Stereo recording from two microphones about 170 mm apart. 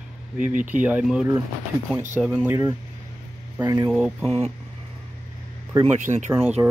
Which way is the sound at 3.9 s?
Centre (ahead or behind).